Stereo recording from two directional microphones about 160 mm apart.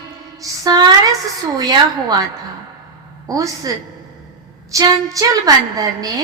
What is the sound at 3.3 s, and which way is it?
Speech, 20° right (ahead or behind).